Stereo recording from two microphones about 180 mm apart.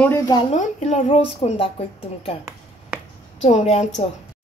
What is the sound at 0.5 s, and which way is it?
A woman's voice, 40° left (ahead or behind).